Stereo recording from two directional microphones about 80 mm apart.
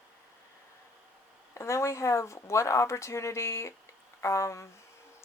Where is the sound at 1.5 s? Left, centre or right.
Left.